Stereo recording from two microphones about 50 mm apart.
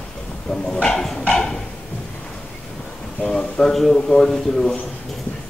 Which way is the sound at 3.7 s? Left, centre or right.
Centre.